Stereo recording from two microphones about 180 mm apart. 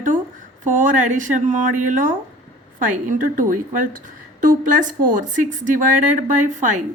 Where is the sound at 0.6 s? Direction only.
45° right (ahead or behind).